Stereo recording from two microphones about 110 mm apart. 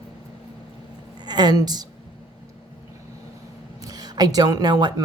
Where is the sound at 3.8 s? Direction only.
35° right (ahead or behind).